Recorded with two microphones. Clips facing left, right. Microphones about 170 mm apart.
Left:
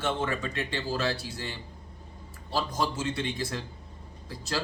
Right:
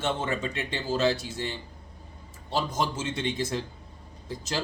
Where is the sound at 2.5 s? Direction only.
20° right (ahead or behind).